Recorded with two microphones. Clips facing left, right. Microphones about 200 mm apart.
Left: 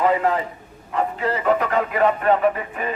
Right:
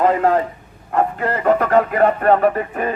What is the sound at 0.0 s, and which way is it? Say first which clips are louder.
A man's voice: right 4 dB; 50° right (ahead or behind).